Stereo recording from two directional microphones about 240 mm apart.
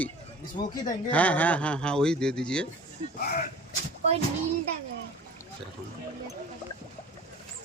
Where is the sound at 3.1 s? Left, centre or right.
Left.